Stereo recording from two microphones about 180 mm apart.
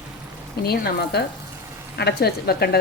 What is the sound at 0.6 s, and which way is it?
A woman's voice, 60° left (ahead or behind).